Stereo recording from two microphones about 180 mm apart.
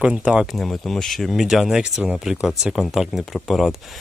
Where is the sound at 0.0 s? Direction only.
5° right (ahead or behind).